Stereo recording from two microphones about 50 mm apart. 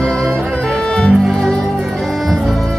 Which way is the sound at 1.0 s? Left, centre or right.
Centre.